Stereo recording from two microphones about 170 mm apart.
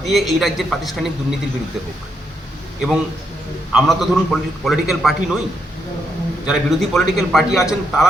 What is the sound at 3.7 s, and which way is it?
A man's voice, centre (ahead or behind).